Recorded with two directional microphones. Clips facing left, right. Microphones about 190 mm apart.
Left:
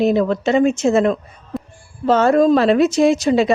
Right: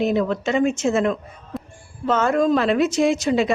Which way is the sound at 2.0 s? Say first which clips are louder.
Left 5 dB; 35° left (ahead or behind).